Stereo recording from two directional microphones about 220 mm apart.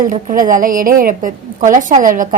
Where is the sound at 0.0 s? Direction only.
40° right (ahead or behind).